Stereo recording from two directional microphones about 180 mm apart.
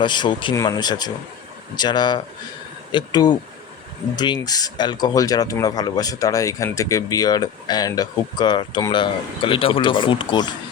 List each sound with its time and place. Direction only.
0.0 s speech: 25° left (ahead or behind)